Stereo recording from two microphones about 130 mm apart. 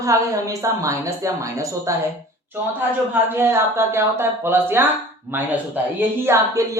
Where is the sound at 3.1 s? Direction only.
15° right (ahead or behind).